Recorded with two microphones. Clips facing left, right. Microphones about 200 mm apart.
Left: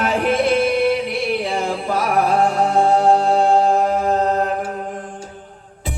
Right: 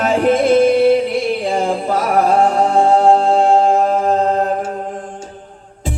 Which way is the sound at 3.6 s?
45° right (ahead or behind).